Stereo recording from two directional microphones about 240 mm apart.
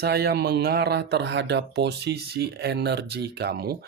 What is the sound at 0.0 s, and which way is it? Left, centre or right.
Speech, right.